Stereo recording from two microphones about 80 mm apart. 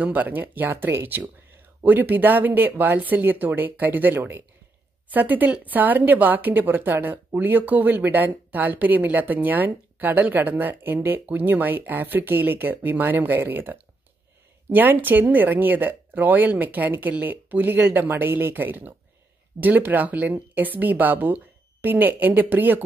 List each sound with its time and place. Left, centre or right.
0.0 s speech: right